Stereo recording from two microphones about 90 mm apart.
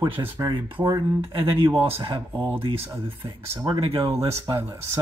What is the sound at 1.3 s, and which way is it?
Speech, 70° right (ahead or behind).